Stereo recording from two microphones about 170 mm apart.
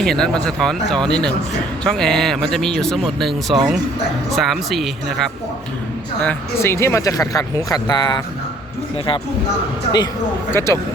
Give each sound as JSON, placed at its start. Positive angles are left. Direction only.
{"t": 0.0, "sound": "speech", "side_deg": 5}
{"t": 10.5, "sound": "speech", "side_deg": 15}